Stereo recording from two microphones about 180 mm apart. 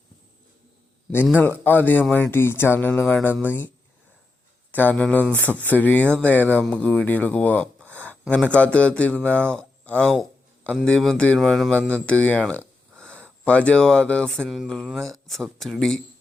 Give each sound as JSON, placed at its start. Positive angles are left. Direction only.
{"t": 1.4, "sound": "speech", "side_deg": 10}
{"t": 4.7, "sound": "speech", "side_deg": 10}
{"t": 5.2, "sound": "speech", "side_deg": -10}
{"t": 5.6, "sound": "speech", "side_deg": 10}
{"t": 7.8, "sound": "a sound", "side_deg": -10}
{"t": 8.5, "sound": "speech", "side_deg": 5}